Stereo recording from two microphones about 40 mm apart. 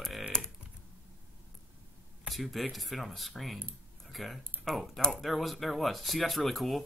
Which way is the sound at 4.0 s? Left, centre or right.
Centre.